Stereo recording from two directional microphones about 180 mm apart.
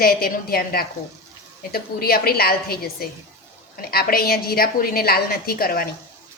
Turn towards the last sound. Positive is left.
turn(degrees=55)  # may be behind; listen again after turning